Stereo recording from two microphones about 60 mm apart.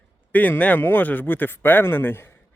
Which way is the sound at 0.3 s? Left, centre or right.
Left.